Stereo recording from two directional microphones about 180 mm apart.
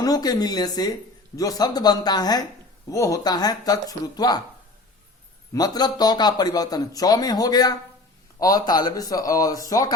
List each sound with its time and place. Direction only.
0.0 s a man's voice: 20° left (ahead or behind)
5.5 s a man's voice: 20° left (ahead or behind)